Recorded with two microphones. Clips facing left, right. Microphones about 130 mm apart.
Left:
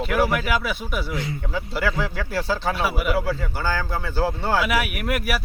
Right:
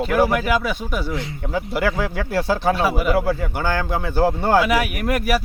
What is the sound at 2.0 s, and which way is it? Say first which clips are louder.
Speech: right 4 dB; 50° right (ahead or behind).